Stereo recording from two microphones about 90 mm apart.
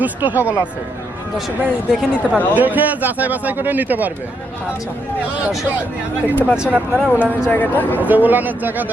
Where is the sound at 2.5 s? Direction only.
20° right (ahead or behind).